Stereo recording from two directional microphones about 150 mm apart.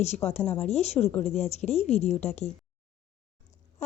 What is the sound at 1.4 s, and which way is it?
Speech, 45° left (ahead or behind).